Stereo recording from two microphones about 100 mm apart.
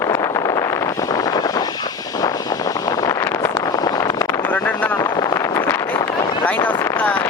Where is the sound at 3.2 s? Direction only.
25° left (ahead or behind).